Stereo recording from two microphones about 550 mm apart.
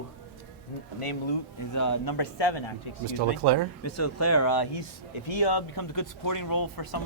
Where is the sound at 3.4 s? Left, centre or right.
Right.